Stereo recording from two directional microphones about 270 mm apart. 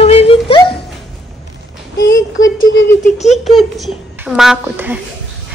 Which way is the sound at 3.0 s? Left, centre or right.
Left.